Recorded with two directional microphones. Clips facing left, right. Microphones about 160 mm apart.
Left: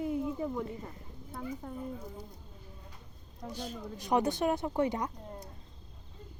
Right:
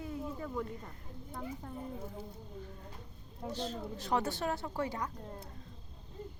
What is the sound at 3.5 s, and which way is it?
Speech, 10° left (ahead or behind).